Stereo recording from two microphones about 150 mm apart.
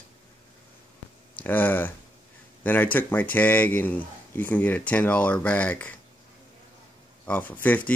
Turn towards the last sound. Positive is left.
turn(degrees=10)  # may be behind; listen again after turning